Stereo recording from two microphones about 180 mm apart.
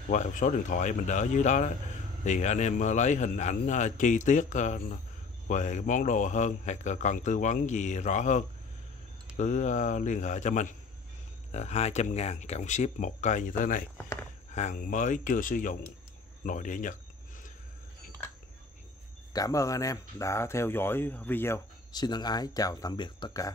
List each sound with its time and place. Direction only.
0.1 s speech: 45° left (ahead or behind)
19.3 s speech: 20° left (ahead or behind)
21.9 s speech: 25° left (ahead or behind)